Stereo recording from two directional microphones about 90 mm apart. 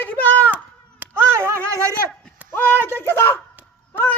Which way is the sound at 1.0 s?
25° right (ahead or behind).